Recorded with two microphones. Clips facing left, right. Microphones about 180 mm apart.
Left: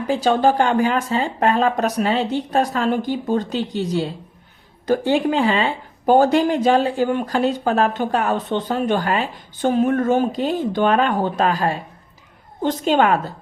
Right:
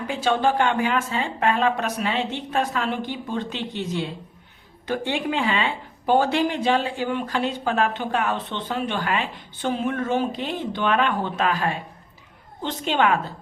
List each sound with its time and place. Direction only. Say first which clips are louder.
0.1 s a woman's voice: left 5 dB; 40° left (ahead or behind)